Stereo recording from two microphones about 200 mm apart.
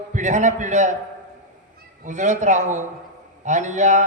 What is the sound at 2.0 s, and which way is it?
A man's voice, 35° right (ahead or behind).